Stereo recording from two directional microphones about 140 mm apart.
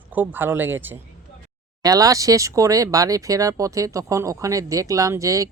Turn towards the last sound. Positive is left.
turn(degrees=-25)  # may be behind; listen again after turning